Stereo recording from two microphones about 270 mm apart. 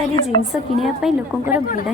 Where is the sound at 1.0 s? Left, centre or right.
Centre.